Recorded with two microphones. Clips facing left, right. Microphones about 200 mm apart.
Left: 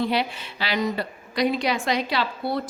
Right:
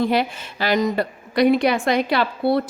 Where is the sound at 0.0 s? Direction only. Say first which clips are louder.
Right 4 dB; 45° right (ahead or behind).